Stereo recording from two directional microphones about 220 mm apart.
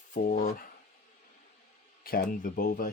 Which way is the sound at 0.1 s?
40° left (ahead or behind).